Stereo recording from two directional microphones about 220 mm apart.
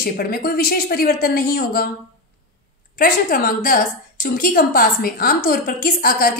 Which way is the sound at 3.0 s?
40° left (ahead or behind).